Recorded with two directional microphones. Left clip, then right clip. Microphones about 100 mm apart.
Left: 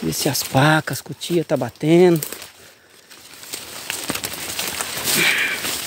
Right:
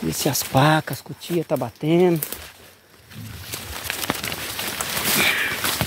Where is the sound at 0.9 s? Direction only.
75° left (ahead or behind).